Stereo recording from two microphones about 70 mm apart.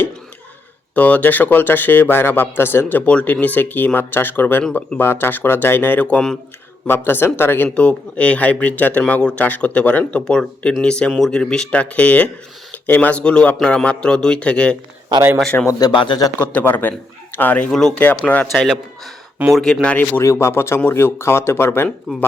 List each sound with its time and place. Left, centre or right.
0.9 s speech: left
3.1 s a man's voice: centre
6.8 s speech: left
7.7 s a man's voice: centre
15.8 s speech: left
16.4 s speech: left
17.7 s a man's voice: centre
17.9 s speech: left
18.5 s a man's voice: centre
20.2 s speech: left